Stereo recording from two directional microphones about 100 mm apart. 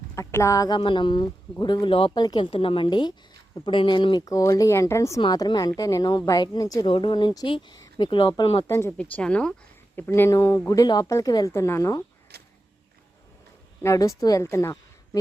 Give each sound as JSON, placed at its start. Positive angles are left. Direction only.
{"t": 0.2, "sound": "a woman's voice", "side_deg": 30}
{"t": 0.8, "sound": "speech", "side_deg": 55}
{"t": 2.1, "sound": "speech", "side_deg": 45}
{"t": 2.4, "sound": "a woman's voice", "side_deg": 65}
{"t": 4.3, "sound": "speech", "side_deg": 35}
{"t": 5.2, "sound": "speech", "side_deg": 45}
{"t": 6.8, "sound": "a woman's voice", "side_deg": 55}
{"t": 8.6, "sound": "speech", "side_deg": 25}
{"t": 9.0, "sound": "speech", "side_deg": 10}
{"t": 9.9, "sound": "speech", "side_deg": 20}
{"t": 11.5, "sound": "speech", "side_deg": 25}
{"t": 13.8, "sound": "a woman's voice", "side_deg": 35}